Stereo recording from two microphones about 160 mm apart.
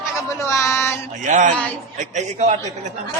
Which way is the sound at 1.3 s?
50° right (ahead or behind).